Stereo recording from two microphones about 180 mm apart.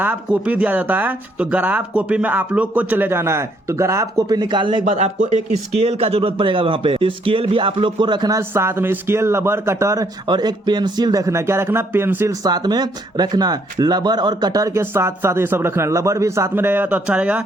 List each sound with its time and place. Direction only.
0.0 s speech: 10° right (ahead or behind)